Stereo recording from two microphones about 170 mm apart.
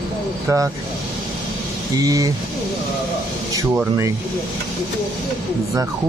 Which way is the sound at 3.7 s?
15° right (ahead or behind).